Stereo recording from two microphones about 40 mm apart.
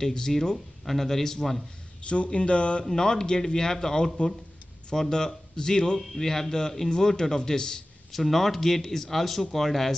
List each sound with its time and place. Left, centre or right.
0.0 s speech: centre
2.0 s speech: left
2.9 s speech: centre
8.1 s speech: centre